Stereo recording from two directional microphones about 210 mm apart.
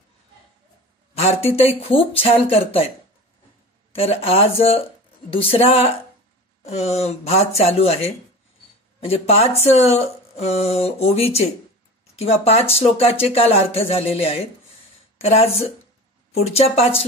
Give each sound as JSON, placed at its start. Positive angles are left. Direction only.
{"t": 1.1, "sound": "speech", "side_deg": 30}
{"t": 3.9, "sound": "speech", "side_deg": 30}